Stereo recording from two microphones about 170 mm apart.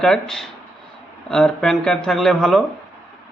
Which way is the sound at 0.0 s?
5° left (ahead or behind).